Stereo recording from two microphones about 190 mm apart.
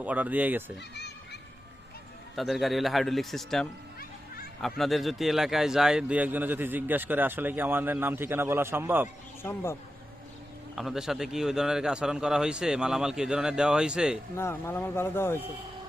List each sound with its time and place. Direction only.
0.0 s a man's voice: 10° right (ahead or behind)
0.9 s a sound: 60° left (ahead or behind)
2.3 s a man's voice: centre (ahead or behind)
9.4 s speech: 15° left (ahead or behind)
10.8 s a man's voice: centre (ahead or behind)
14.3 s speech: 10° left (ahead or behind)